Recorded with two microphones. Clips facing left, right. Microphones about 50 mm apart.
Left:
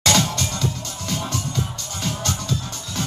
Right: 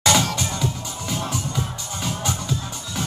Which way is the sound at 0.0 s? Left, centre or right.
Centre.